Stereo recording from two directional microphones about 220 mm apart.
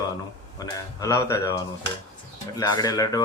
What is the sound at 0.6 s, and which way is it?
Speech, 15° left (ahead or behind).